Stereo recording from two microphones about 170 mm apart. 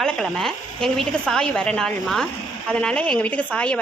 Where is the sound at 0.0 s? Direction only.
Centre (ahead or behind).